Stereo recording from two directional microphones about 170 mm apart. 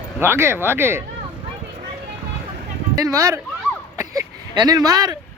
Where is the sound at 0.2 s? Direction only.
15° right (ahead or behind).